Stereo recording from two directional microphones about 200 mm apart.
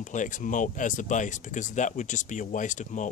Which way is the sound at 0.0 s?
40° left (ahead or behind).